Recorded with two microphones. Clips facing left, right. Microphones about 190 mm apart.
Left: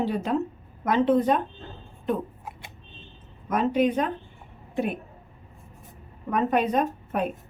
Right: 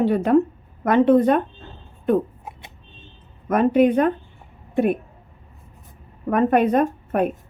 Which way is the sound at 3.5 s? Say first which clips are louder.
Right 6 dB; 55° right (ahead or behind).